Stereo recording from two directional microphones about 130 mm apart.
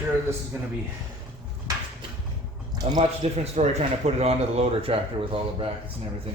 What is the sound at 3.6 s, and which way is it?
Speech, 50° right (ahead or behind).